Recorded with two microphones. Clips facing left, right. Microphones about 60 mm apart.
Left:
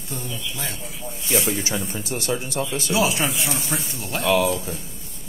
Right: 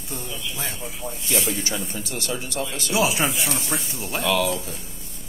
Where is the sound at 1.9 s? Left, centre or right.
Left.